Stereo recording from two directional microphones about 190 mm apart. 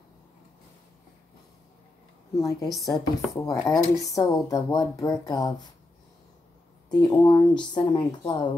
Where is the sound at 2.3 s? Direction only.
20° left (ahead or behind).